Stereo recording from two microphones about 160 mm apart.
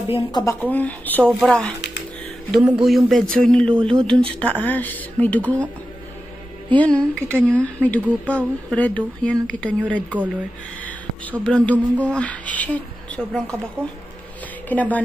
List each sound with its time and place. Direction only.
0.1 s speech: 25° left (ahead or behind)
0.7 s speech: 10° left (ahead or behind)
6.7 s speech: 10° left (ahead or behind)
14.7 s speech: 10° left (ahead or behind)